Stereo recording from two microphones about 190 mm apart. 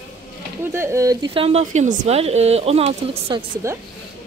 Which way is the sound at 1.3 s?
30° right (ahead or behind).